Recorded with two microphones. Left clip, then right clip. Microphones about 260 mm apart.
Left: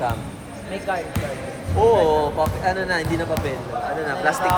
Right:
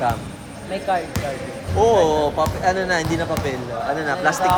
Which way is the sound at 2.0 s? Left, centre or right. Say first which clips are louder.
Right 1 dB; right.